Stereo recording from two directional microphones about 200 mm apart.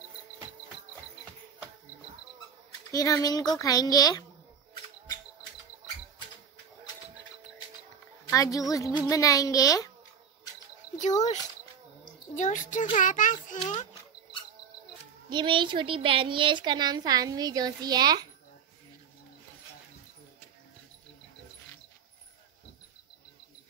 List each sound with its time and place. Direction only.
2.9 s a child's voice: 15° left (ahead or behind)
8.3 s a child's voice: 15° left (ahead or behind)
12.4 s a child's voice: 40° left (ahead or behind)
15.2 s a woman's voice: 25° right (ahead or behind)